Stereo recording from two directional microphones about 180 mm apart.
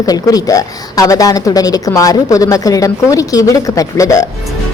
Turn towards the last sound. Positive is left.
turn(degrees=15)  # may be behind; listen again after turning